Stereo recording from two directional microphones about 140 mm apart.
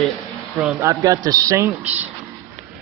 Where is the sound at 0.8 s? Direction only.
25° right (ahead or behind).